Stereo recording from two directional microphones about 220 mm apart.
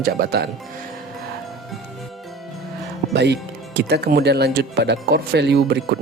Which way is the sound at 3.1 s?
50° right (ahead or behind).